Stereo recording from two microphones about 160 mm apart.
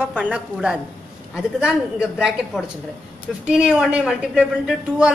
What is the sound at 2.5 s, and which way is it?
A woman's voice, centre (ahead or behind).